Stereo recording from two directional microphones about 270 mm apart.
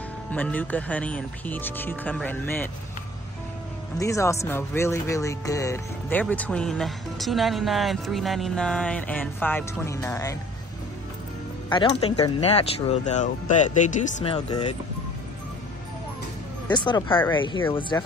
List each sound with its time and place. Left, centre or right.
0.3 s speech: centre
4.0 s speech: centre
11.7 s speech: left
16.6 s speech: centre